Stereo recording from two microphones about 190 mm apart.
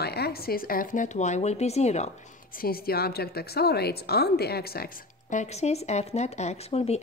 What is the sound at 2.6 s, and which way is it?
A woman's voice, 50° left (ahead or behind).